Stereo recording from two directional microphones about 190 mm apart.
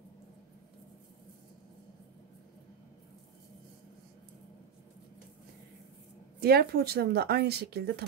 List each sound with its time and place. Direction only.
6.4 s speech: 55° right (ahead or behind)